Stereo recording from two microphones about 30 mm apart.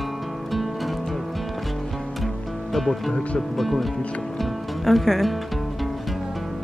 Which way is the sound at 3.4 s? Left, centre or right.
Centre.